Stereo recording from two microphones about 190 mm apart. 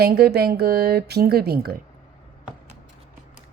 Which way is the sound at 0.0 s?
55° right (ahead or behind).